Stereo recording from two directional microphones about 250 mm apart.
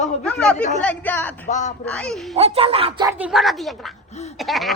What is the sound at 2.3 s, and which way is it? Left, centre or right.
Speech, right.